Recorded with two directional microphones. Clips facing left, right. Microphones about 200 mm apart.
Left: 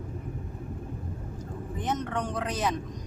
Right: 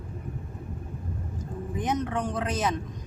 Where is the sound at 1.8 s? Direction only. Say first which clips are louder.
Right 3 dB; 15° right (ahead or behind).